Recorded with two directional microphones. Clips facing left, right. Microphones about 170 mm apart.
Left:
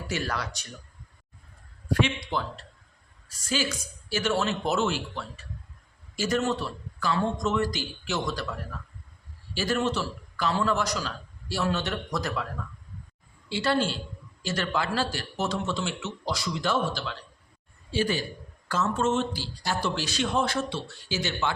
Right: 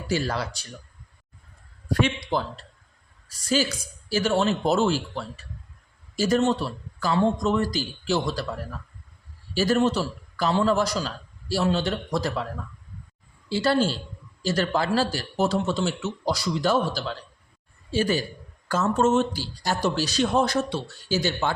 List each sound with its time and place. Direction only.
0.1 s a man's voice: 30° right (ahead or behind)
1.9 s a man's voice: 40° right (ahead or behind)
4.1 s a man's voice: 35° right (ahead or behind)
9.6 s a man's voice: 40° right (ahead or behind)
13.5 s a man's voice: 35° right (ahead or behind)